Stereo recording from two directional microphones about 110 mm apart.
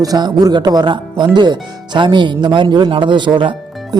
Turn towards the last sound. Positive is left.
turn(degrees=-45)  # may be behind; listen again after turning